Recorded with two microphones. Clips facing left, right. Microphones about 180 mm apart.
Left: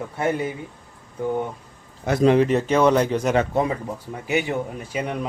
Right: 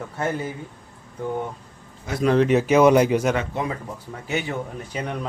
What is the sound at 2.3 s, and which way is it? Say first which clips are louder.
Speech: right 1 dB; centre (ahead or behind).